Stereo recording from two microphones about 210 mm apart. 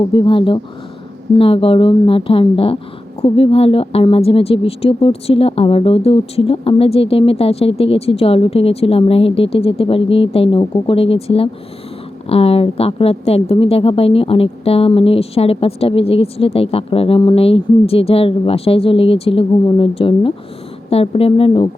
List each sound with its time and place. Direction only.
0.0 s a woman's voice: 25° left (ahead or behind)